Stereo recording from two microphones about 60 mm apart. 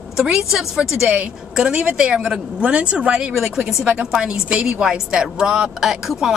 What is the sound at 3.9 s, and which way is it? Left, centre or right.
A woman's voice, centre.